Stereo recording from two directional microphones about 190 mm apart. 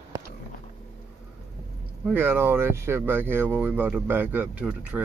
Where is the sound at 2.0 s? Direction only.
10° right (ahead or behind).